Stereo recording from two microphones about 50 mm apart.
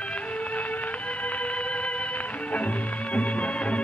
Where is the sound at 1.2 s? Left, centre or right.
Left.